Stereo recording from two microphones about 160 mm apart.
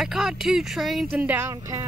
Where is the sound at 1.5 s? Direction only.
20° right (ahead or behind).